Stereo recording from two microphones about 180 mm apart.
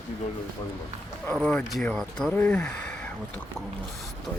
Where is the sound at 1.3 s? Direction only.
Centre (ahead or behind).